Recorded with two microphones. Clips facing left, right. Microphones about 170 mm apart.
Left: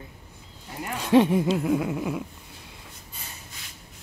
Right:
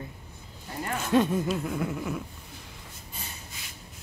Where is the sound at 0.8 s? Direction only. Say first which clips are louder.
Left 5 dB; 15° left (ahead or behind).